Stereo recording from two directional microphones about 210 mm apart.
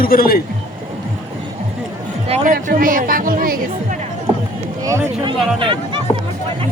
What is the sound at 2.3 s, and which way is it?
Speech, 40° right (ahead or behind).